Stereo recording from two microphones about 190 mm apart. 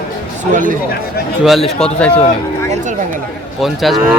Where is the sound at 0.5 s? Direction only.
45° right (ahead or behind).